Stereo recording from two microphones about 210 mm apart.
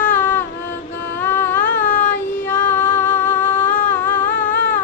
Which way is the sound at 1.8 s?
40° left (ahead or behind).